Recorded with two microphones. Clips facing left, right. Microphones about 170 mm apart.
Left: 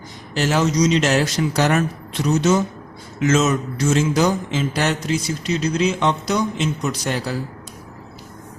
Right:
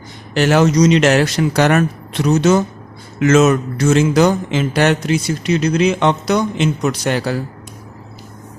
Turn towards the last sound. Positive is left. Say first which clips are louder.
# right 5 dB
turn(degrees=-70)  # may be behind; listen again after turning